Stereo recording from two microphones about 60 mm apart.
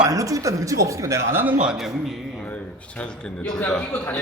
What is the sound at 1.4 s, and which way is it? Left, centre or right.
Speech, centre.